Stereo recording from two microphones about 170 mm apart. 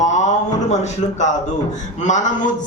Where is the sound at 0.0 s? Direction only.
45° left (ahead or behind).